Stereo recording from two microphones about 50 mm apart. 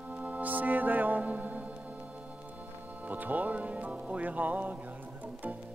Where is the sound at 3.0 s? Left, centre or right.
Right.